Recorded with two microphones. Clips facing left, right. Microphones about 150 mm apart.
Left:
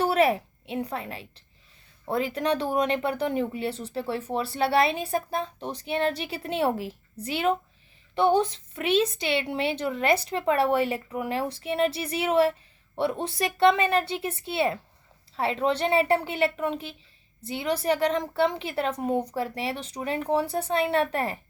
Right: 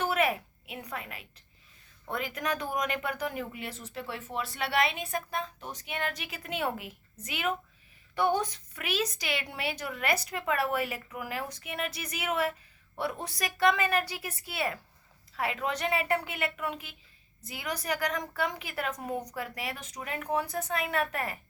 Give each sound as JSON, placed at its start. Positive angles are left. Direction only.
{"t": 0.0, "sound": "a woman's voice", "side_deg": 30}